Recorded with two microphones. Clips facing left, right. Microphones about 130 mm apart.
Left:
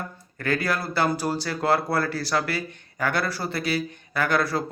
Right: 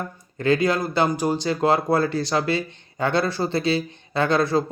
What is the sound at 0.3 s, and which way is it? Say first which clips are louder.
Speech: right 6 dB; 20° right (ahead or behind).